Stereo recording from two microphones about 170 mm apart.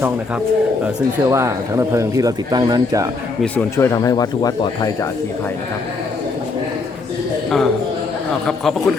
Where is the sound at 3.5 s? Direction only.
15° left (ahead or behind).